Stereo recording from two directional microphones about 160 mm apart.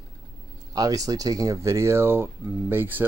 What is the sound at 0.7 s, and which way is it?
Speech, 20° right (ahead or behind).